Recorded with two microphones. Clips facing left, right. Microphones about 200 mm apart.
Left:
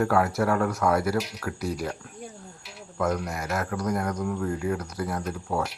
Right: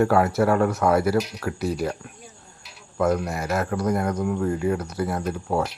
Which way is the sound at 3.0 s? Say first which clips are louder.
Right 5 dB; 25° right (ahead or behind).